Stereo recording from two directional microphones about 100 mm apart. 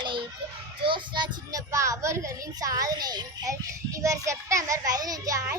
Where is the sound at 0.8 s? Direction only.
55° right (ahead or behind).